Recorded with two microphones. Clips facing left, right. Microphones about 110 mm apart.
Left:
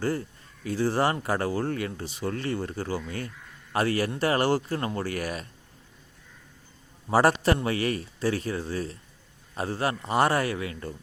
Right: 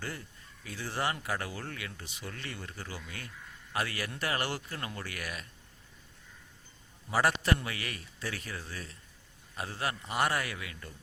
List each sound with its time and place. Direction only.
0.0 s speech: 35° left (ahead or behind)
7.1 s speech: 40° left (ahead or behind)